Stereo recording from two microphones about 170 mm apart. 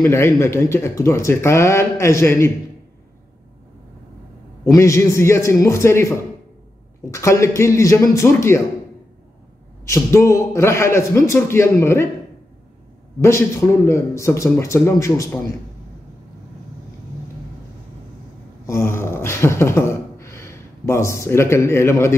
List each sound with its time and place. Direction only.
0.0 s speech: 15° left (ahead or behind)
4.6 s speech: 20° left (ahead or behind)
9.8 s speech: 15° left (ahead or behind)
13.2 s speech: 15° left (ahead or behind)
18.7 s a sound: 15° left (ahead or behind)